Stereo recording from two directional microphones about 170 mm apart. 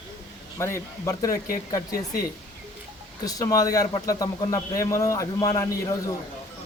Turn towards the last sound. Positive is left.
turn(degrees=20)  # may be behind; listen again after turning